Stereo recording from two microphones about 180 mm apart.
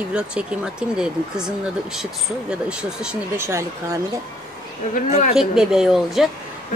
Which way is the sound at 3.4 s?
15° right (ahead or behind).